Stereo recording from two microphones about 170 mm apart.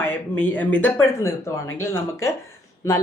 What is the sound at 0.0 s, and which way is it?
Speech, 10° left (ahead or behind).